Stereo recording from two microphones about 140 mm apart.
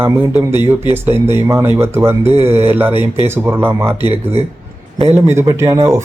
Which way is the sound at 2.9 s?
35° left (ahead or behind).